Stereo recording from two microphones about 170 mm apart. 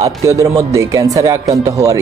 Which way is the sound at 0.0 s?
20° right (ahead or behind).